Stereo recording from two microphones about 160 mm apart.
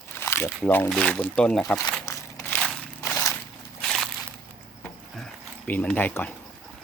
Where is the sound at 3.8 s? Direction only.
Centre (ahead or behind).